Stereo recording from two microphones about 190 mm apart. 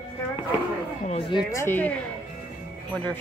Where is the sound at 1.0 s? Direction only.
30° left (ahead or behind).